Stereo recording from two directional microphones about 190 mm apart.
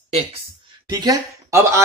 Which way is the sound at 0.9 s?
20° right (ahead or behind).